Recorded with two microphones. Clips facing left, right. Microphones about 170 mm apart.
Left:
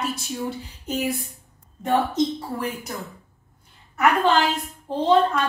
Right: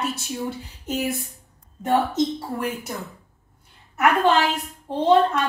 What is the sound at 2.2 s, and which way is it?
A woman's voice, 5° right (ahead or behind).